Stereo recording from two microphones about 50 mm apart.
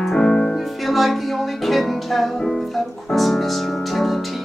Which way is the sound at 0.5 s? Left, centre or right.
Centre.